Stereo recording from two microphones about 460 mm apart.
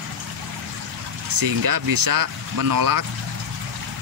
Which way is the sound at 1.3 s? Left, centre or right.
Right.